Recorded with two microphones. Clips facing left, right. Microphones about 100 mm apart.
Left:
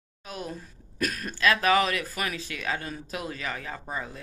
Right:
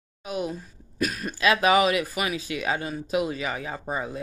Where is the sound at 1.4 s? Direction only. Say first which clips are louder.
Right 3 dB; 15° right (ahead or behind).